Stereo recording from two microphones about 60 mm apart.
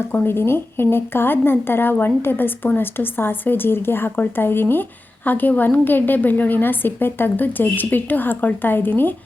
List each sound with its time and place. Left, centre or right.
0.3 s speech: left